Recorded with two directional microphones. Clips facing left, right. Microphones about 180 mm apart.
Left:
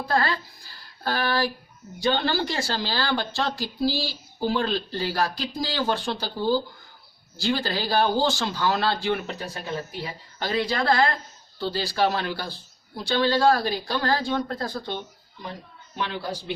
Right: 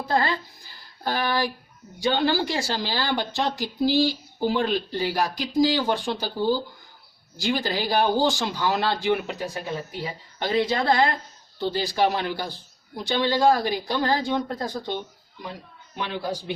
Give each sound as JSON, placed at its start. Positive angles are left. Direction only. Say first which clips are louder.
{"t": 0.0, "sound": "speech", "louder": "right 1 dB", "side_deg": -20}